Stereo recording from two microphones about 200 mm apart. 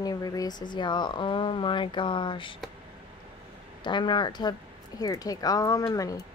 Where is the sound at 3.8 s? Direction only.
25° left (ahead or behind).